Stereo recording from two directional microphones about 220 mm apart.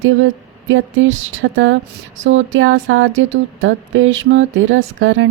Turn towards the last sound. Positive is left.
turn(degrees=-60)  # may be behind; listen again after turning